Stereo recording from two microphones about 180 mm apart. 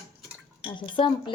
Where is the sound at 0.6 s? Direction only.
25° left (ahead or behind).